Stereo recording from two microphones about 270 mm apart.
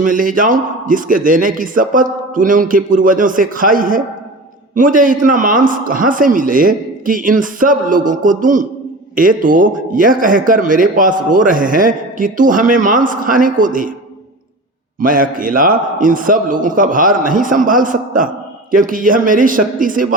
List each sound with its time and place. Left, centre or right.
0.0 s speech: right
15.0 s a man's voice: right